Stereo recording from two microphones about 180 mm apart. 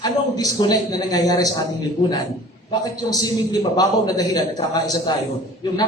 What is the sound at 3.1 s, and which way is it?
A man's voice, 20° left (ahead or behind).